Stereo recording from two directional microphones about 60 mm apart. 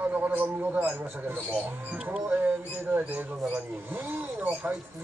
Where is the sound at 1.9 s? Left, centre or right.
Centre.